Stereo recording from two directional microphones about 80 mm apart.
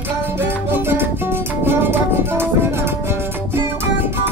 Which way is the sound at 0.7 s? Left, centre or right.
Right.